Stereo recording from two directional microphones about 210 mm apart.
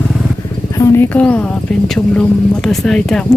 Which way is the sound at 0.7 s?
10° left (ahead or behind).